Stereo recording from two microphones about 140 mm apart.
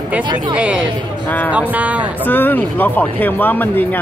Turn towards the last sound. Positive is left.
turn(degrees=15)  # may be behind; listen again after turning